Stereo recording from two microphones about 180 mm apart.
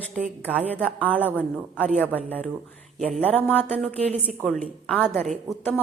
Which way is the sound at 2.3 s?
10° left (ahead or behind).